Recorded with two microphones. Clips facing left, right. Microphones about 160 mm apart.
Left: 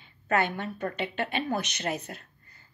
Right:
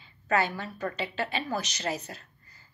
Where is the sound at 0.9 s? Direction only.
55° left (ahead or behind).